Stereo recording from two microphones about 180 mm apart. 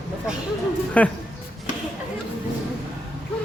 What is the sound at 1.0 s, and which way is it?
Speech, 10° left (ahead or behind).